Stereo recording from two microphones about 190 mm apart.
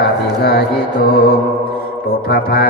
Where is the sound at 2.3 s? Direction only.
55° left (ahead or behind).